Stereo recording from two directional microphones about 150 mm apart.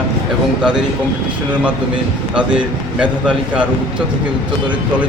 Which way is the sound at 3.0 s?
10° right (ahead or behind).